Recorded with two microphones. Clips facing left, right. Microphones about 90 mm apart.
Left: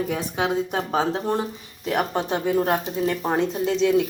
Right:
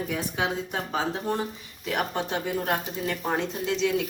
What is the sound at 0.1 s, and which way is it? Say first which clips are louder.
Speech: left 4 dB; 40° left (ahead or behind).